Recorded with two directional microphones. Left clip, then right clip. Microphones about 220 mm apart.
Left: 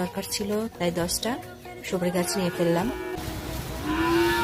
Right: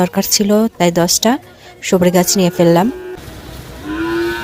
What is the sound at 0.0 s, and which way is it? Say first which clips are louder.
Speech: right 15 dB; 40° right (ahead or behind).